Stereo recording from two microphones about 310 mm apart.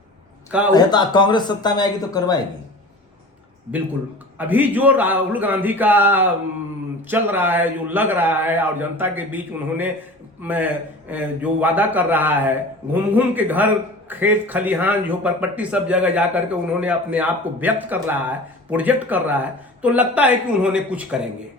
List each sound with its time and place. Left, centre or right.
0.7 s speech: centre
4.4 s a man's voice: centre